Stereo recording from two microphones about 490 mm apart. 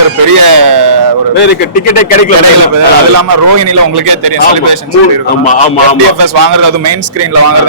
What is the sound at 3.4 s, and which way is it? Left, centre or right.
Speech, right.